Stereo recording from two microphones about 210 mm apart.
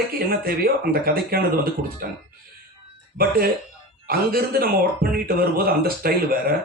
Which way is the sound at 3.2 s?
45° right (ahead or behind).